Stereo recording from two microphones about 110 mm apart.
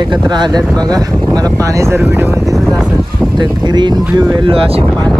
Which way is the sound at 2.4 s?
Centre (ahead or behind).